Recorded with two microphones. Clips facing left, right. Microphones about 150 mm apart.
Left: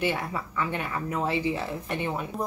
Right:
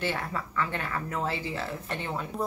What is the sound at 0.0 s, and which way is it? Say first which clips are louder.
Speech: left 3 dB; 15° left (ahead or behind).